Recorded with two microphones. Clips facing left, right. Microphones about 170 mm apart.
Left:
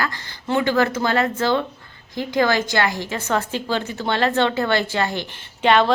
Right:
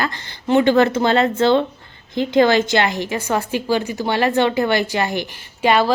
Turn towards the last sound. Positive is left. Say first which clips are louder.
# right 1 dB
turn(degrees=-10)  # may be behind; listen again after turning